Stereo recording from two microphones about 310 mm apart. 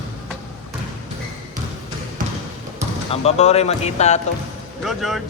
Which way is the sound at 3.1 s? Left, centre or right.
Centre.